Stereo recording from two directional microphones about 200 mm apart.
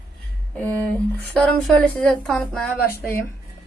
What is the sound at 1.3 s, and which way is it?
A woman's voice, 5° left (ahead or behind).